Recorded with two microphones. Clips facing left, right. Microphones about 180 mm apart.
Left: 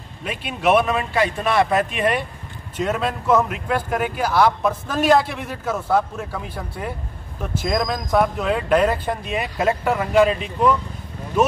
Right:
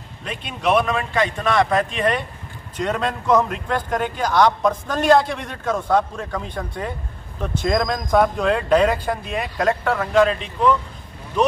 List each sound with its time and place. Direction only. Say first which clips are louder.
0.2 s a man's voice: left 2 dB; 5° left (ahead or behind)